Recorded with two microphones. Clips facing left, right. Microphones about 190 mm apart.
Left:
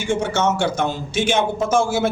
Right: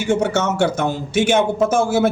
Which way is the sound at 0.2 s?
60° right (ahead or behind).